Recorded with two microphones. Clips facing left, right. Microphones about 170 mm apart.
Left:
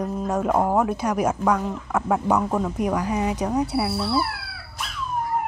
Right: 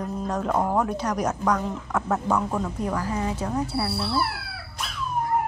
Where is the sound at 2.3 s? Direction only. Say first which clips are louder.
Left 3 dB; 20° left (ahead or behind).